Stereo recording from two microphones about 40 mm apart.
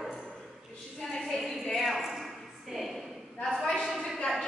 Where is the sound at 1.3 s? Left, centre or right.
Centre.